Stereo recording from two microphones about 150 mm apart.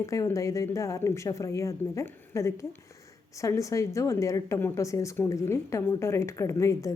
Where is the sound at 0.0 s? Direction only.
20° left (ahead or behind).